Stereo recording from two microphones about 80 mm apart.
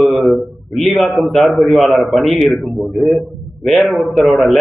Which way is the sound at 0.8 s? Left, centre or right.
Centre.